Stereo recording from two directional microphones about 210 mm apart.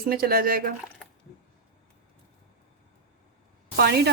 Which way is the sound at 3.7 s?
50° right (ahead or behind).